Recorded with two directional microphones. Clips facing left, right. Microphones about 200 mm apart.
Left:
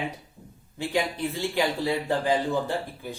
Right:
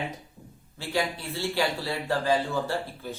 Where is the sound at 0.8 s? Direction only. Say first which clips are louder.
Left 3 dB; 15° left (ahead or behind).